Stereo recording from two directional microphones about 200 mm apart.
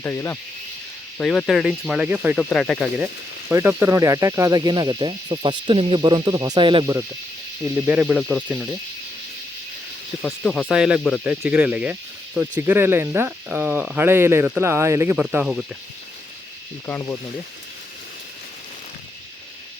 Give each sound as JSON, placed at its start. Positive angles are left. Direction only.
{"t": 0.0, "sound": "speech", "side_deg": 10}
{"t": 3.5, "sound": "speech", "side_deg": -10}
{"t": 7.8, "sound": "speech", "side_deg": -5}
{"t": 10.2, "sound": "speech", "side_deg": 5}
{"t": 16.8, "sound": "speech", "side_deg": 10}